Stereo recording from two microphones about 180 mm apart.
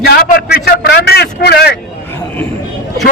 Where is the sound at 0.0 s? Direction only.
60° left (ahead or behind).